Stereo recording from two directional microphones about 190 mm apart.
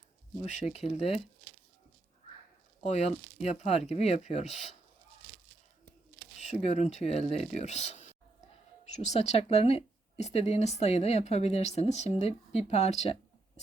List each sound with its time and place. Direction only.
0.4 s speech: 35° left (ahead or behind)
2.8 s speech: 35° left (ahead or behind)
6.4 s speech: 35° left (ahead or behind)